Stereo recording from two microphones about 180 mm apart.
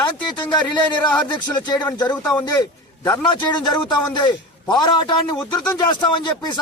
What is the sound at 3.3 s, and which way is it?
A man's voice, 25° left (ahead or behind).